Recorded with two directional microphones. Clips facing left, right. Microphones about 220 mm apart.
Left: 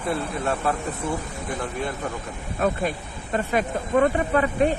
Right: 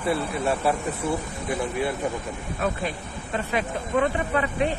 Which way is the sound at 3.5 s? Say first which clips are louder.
Left 3 dB; 45° left (ahead or behind).